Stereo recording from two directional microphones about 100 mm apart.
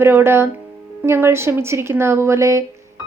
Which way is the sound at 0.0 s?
25° right (ahead or behind).